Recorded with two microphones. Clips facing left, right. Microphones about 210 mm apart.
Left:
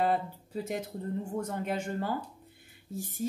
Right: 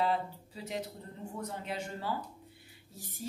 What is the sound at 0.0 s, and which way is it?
Speech, 50° left (ahead or behind).